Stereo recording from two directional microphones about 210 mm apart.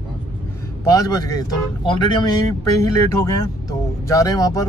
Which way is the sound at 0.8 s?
15° left (ahead or behind).